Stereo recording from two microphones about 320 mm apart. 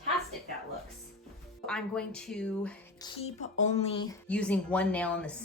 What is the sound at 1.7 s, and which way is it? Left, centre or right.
Speech, centre.